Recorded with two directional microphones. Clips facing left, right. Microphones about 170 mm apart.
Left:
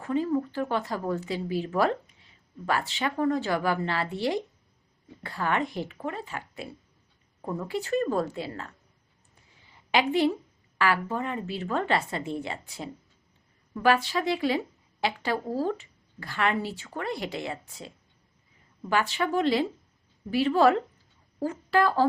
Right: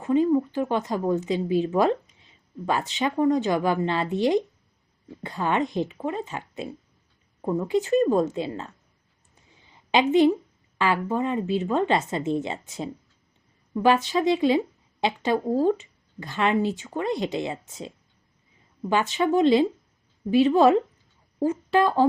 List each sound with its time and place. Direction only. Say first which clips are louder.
0.0 s speech: right 6 dB; 20° right (ahead or behind)
9.3 s a sound: right 3 dB; 20° right (ahead or behind)
10.8 s speech: right 3 dB; 20° right (ahead or behind)